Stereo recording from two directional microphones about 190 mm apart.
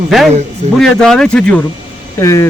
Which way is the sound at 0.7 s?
Centre (ahead or behind).